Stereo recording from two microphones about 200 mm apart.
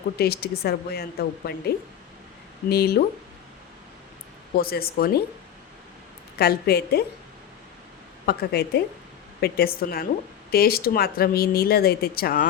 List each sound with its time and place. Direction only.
0.2 s speech: 50° left (ahead or behind)
2.6 s speech: 50° left (ahead or behind)
4.5 s speech: 50° left (ahead or behind)
6.4 s speech: 50° left (ahead or behind)
8.3 s speech: 50° left (ahead or behind)